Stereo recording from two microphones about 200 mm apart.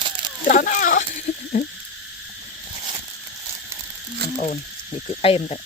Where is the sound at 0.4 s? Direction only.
40° left (ahead or behind).